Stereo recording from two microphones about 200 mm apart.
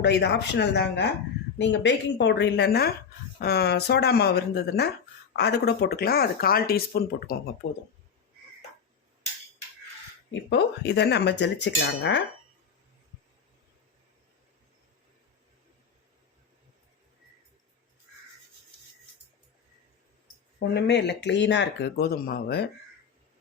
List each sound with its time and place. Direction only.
0.0 s speech: 55° left (ahead or behind)
10.5 s speech: 55° left (ahead or behind)
20.6 s speech: 55° left (ahead or behind)